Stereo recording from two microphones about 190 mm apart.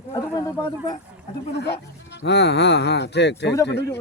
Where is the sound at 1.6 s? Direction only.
60° left (ahead or behind).